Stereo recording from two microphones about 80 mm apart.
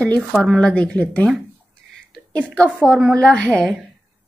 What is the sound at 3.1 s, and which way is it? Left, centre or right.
Speech, centre.